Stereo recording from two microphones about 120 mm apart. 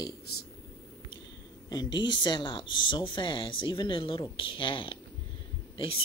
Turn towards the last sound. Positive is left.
turn(degrees=50)  # may be behind; listen again after turning